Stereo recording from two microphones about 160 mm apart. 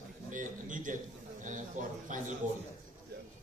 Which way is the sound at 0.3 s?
55° right (ahead or behind).